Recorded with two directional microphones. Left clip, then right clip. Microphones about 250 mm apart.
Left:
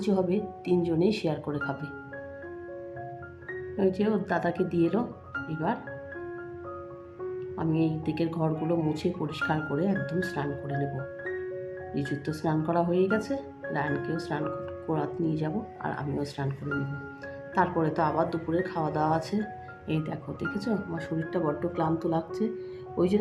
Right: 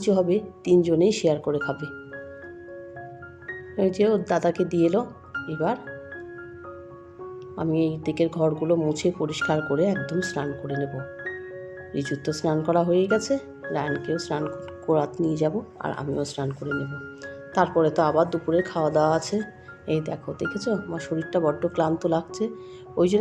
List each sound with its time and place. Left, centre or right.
0.0 s speech: right
3.8 s speech: right
7.5 s speech: right
11.9 s speech: right
17.5 s speech: right
21.3 s speech: right